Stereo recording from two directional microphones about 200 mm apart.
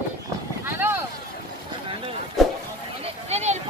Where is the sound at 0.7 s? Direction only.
10° right (ahead or behind).